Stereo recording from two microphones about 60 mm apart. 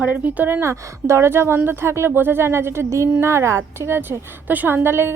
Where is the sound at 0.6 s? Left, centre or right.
Right.